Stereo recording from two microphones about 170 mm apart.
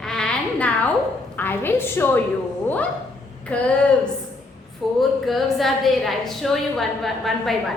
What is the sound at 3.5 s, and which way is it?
Speech, 10° left (ahead or behind).